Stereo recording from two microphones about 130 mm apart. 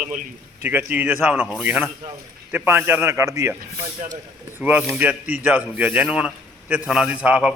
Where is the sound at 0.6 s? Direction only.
15° right (ahead or behind).